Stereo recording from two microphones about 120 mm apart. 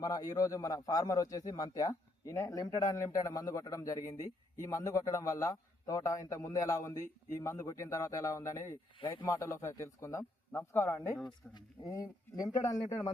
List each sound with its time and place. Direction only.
0.0 s a man's voice: 30° left (ahead or behind)
9.0 s speech: 45° left (ahead or behind)
9.2 s a man's voice: 25° left (ahead or behind)